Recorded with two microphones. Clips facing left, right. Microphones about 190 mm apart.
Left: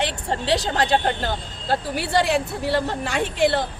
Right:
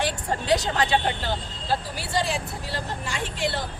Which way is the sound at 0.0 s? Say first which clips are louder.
Left 2 dB; 30° left (ahead or behind).